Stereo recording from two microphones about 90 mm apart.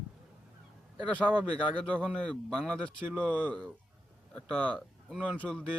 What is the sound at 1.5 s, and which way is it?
Speech, 15° left (ahead or behind).